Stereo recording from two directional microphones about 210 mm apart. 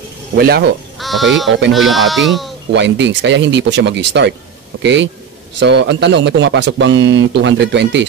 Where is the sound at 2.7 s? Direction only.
55° right (ahead or behind).